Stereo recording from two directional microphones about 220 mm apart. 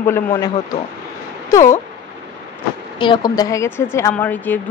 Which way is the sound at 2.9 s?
20° left (ahead or behind).